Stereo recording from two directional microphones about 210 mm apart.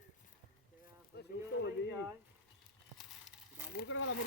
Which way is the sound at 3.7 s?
60° left (ahead or behind).